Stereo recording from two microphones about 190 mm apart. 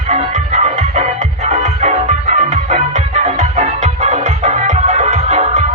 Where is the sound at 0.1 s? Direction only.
35° right (ahead or behind).